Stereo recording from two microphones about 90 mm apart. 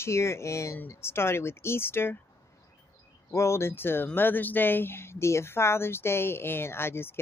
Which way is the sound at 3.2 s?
30° left (ahead or behind).